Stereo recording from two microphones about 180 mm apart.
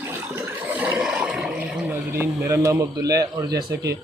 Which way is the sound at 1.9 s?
15° right (ahead or behind).